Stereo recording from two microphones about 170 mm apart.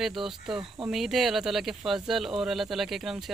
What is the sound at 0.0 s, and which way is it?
Speech, centre (ahead or behind).